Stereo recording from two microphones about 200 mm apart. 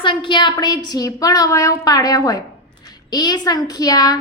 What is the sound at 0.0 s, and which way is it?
A woman's voice, 25° left (ahead or behind).